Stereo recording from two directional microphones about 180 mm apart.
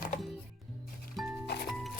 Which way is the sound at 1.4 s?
65° left (ahead or behind).